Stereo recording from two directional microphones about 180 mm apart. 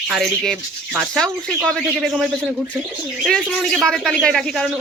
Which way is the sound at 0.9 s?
Centre (ahead or behind).